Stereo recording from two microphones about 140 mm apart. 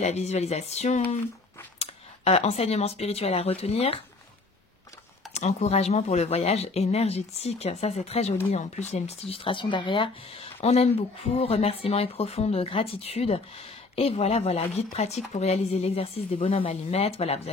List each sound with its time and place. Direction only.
0.0 s speech: 50° left (ahead or behind)
5.3 s speech: 50° left (ahead or behind)